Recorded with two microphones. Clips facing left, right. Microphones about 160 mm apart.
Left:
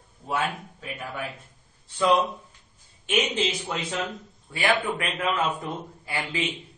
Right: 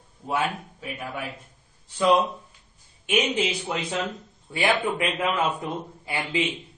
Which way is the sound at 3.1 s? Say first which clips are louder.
Right 1 dB; 10° right (ahead or behind).